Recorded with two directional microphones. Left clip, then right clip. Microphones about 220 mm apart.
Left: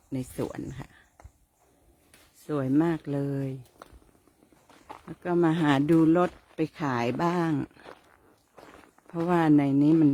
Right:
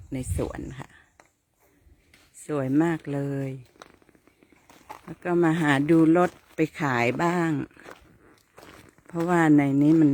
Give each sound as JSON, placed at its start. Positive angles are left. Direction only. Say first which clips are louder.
{"t": 0.1, "sound": "speech", "louder": "right 2 dB", "side_deg": 0}
{"t": 2.5, "sound": "speech", "louder": "right 2 dB", "side_deg": 0}
{"t": 5.0, "sound": "speech", "louder": "right 2 dB", "side_deg": 0}
{"t": 6.7, "sound": "speech", "louder": "right 3 dB", "side_deg": -15}
{"t": 7.0, "sound": "speech", "louder": "right 3 dB", "side_deg": -5}
{"t": 9.0, "sound": "speech", "louder": "right 3 dB", "side_deg": 0}